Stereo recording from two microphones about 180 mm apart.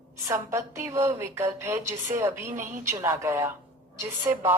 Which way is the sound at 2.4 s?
45° right (ahead or behind).